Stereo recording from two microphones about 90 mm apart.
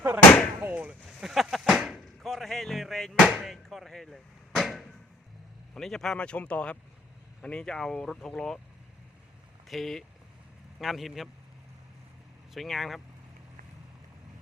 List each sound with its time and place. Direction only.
0.6 s speech: 15° right (ahead or behind)
1.0 s a sound: centre (ahead or behind)
2.2 s music: centre (ahead or behind)
3.2 s a sound: 5° right (ahead or behind)
5.7 s speech: 5° left (ahead or behind)
9.6 s a man's voice: centre (ahead or behind)
12.5 s a man's voice: centre (ahead or behind)